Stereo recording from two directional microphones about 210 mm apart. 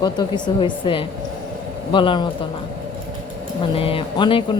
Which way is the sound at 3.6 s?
25° left (ahead or behind).